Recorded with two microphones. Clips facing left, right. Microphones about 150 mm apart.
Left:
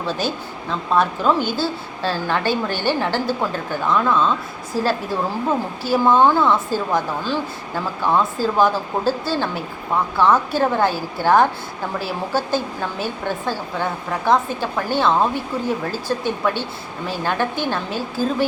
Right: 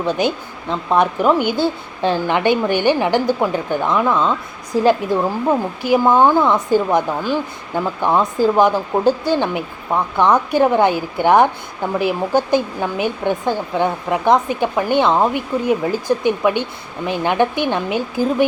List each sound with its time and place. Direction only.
0.0 s a woman's voice: 20° right (ahead or behind)